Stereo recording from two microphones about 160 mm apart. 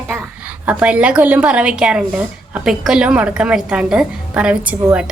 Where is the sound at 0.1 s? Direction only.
5° right (ahead or behind).